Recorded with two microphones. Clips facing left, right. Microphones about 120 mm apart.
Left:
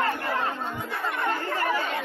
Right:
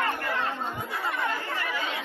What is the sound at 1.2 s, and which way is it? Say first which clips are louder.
Chatter: left 4 dB; 45° left (ahead or behind).